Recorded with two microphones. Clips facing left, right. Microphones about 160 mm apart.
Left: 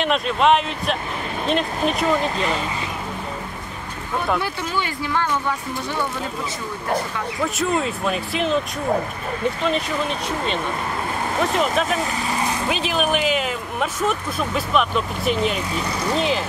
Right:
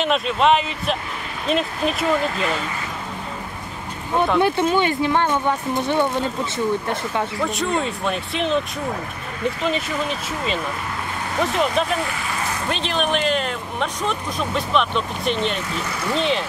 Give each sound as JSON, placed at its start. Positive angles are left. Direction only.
{"t": 0.0, "sound": "speech", "side_deg": 0}
{"t": 4.4, "sound": "speech", "side_deg": -20}
{"t": 7.4, "sound": "speech", "side_deg": 0}
{"t": 9.6, "sound": "speech", "side_deg": 0}